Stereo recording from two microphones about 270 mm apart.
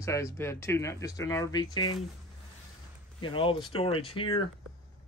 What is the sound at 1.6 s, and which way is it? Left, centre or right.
Speech, left.